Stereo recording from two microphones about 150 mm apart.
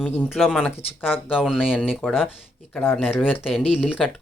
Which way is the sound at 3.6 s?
40° left (ahead or behind).